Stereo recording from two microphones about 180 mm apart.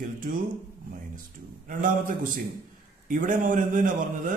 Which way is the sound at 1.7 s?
45° right (ahead or behind).